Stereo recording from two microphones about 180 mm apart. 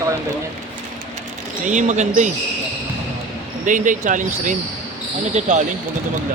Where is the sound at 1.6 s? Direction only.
45° right (ahead or behind).